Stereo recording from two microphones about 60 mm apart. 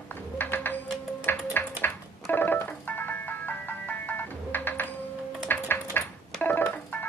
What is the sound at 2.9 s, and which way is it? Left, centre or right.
Music, left.